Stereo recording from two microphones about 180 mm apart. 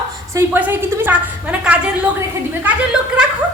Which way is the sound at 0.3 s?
10° right (ahead or behind).